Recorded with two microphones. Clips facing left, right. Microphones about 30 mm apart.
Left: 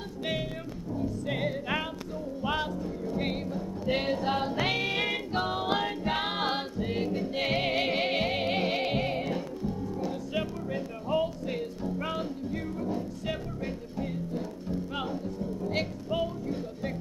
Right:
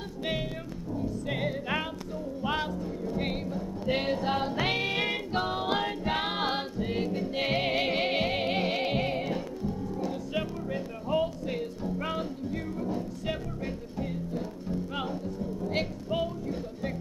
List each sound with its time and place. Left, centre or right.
0.2 s music: centre
15.7 s music: centre